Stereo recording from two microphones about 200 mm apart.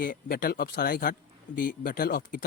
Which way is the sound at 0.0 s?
50° left (ahead or behind).